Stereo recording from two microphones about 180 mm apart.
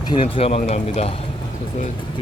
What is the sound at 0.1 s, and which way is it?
Speech, 30° left (ahead or behind).